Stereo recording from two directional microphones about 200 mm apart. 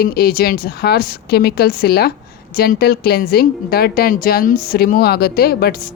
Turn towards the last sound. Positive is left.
turn(degrees=50)  # may be behind; listen again after turning